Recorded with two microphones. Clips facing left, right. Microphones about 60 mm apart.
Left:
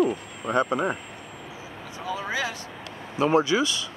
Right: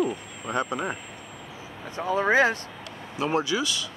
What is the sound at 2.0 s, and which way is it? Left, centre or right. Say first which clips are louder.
Speech: right 8 dB; right.